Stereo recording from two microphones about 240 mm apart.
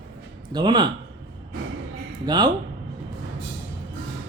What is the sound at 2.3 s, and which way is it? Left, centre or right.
Speech, centre.